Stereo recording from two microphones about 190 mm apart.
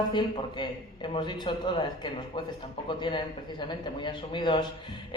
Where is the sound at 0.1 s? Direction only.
25° left (ahead or behind).